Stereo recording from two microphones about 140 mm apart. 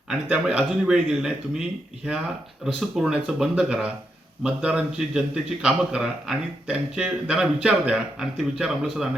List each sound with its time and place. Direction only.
0.1 s a man's voice: 5° right (ahead or behind)
2.9 s a man's voice: 5° right (ahead or behind)